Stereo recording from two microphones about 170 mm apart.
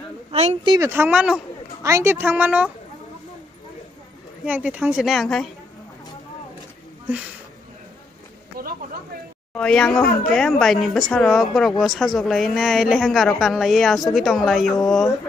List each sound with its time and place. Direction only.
0.3 s speech: 40° right (ahead or behind)
0.7 s a woman's voice: 15° right (ahead or behind)
1.8 s a woman's voice: 15° right (ahead or behind)
4.5 s a woman's voice: 10° right (ahead or behind)
8.6 s a sound: 60° right (ahead or behind)
9.6 s a woman's voice: 5° left (ahead or behind)